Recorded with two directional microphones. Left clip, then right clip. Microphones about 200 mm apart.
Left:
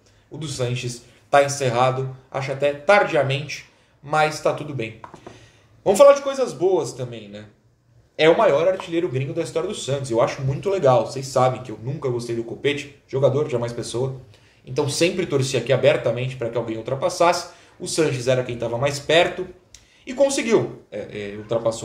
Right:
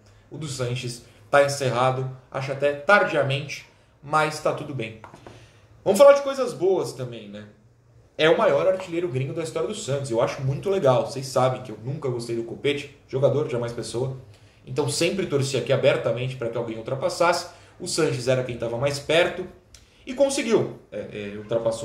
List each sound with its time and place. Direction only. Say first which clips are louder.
0.4 s a man's voice: left 3 dB; 10° left (ahead or behind)